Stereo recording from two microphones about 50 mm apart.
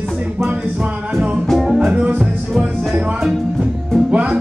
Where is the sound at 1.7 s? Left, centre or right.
Right.